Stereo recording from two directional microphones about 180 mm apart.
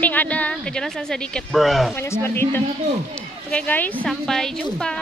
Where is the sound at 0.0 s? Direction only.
10° left (ahead or behind).